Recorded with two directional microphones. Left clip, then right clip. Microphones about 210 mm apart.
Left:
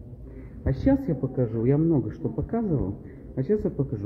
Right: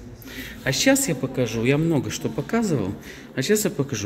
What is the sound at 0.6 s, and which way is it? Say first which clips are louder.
A man's voice: right 5 dB; 5° right (ahead or behind).